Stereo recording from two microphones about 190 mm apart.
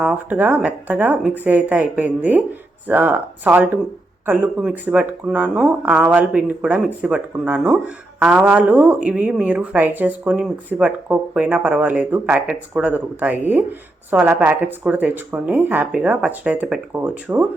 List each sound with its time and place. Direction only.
0.0 s speech: 5° right (ahead or behind)